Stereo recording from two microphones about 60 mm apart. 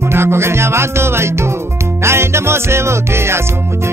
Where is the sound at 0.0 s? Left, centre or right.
Right.